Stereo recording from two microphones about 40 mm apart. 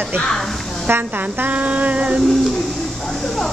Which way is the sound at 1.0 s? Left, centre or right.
Right.